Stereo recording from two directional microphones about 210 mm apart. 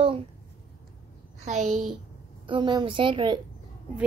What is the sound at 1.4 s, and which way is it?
Speech, 35° right (ahead or behind).